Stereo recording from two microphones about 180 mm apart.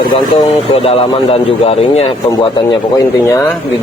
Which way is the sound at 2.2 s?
20° left (ahead or behind).